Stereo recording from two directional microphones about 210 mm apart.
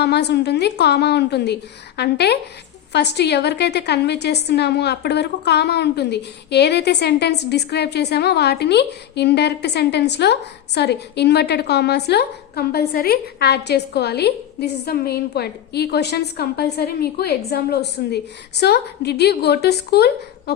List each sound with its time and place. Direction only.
0.0 s a woman's voice: 55° left (ahead or behind)